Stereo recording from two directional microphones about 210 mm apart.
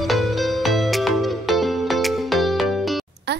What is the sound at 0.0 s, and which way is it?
Music, centre (ahead or behind).